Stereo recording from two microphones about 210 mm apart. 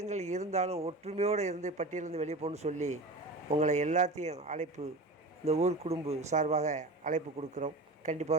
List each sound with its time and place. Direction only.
0.0 s speech: 35° right (ahead or behind)